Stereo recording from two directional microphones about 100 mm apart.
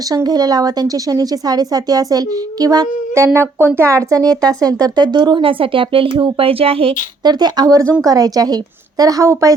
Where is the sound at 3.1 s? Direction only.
25° right (ahead or behind); by 6.9 s 70° right (ahead or behind).